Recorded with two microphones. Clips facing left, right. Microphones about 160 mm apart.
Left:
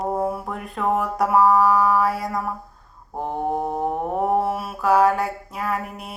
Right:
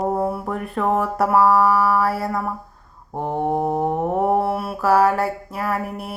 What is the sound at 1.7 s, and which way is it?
Mantra, 15° left (ahead or behind).